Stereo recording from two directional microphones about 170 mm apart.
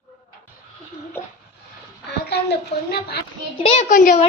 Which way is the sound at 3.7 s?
45° left (ahead or behind).